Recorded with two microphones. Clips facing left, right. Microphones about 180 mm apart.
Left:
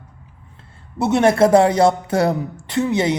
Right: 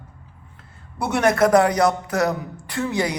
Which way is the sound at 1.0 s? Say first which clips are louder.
Left 4 dB; 25° left (ahead or behind).